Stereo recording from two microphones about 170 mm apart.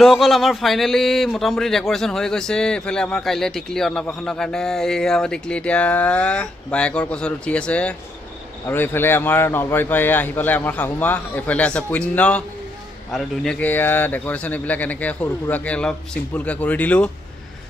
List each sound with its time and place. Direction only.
0.0 s speech: centre (ahead or behind)